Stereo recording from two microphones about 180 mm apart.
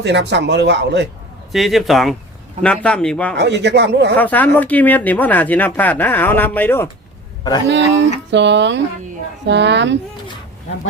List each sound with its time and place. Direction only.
0.0 s speech: 75° right (ahead or behind)
1.5 s a man's voice: centre (ahead or behind)
3.3 s speech: 70° right (ahead or behind)
4.2 s speech: 10° left (ahead or behind)
7.7 s speech: 75° right (ahead or behind)